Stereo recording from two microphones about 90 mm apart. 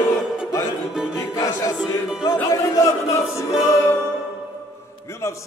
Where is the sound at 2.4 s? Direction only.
40° left (ahead or behind).